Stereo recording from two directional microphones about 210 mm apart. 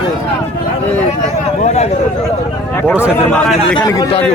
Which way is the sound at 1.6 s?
30° left (ahead or behind).